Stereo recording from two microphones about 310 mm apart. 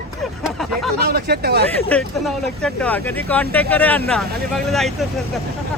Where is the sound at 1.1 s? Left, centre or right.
Right.